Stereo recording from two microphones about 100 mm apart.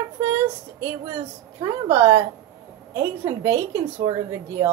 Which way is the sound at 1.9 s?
25° right (ahead or behind).